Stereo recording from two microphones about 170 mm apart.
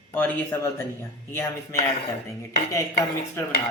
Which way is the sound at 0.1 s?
15° left (ahead or behind).